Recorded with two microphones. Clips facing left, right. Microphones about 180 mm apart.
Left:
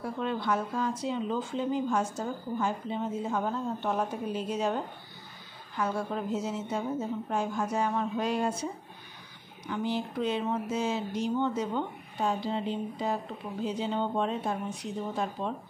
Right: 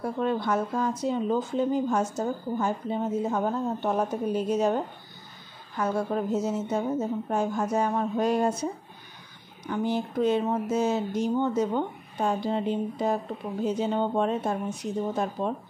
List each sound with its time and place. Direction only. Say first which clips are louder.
0.0 s speech: right 5 dB; 45° right (ahead or behind)
5.8 s speech: right 4 dB; 40° right (ahead or behind)
9.7 s speech: right 4 dB; 50° right (ahead or behind)